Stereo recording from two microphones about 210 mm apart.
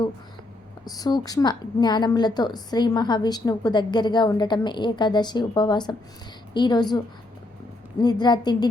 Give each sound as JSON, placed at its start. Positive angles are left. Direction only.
{"t": 0.9, "sound": "a woman's voice", "side_deg": 20}
{"t": 8.0, "sound": "a woman's voice", "side_deg": 20}